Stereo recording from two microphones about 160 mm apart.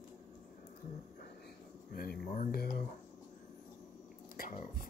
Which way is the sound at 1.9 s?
65° left (ahead or behind).